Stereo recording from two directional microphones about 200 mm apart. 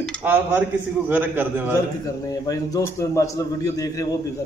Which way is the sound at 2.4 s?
15° left (ahead or behind).